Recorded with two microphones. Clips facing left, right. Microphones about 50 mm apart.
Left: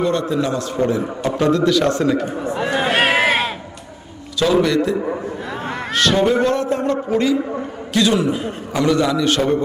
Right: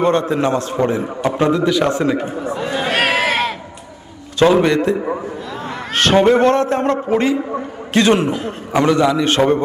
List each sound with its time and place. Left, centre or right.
0.0 s a man's voice: right
1.4 s a man's voice: centre
2.6 s a sound: left
4.5 s a man's voice: right
8.7 s a man's voice: right